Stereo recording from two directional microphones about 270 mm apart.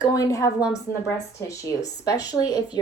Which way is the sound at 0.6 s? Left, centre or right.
Centre.